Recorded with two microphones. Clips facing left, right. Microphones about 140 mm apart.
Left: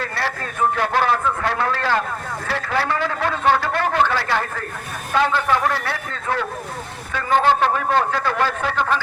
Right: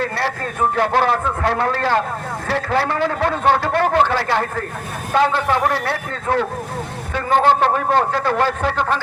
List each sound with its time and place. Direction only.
0.8 s a man's voice: 30° right (ahead or behind)